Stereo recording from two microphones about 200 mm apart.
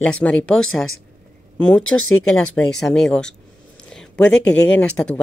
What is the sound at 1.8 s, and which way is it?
Speech, 90° left.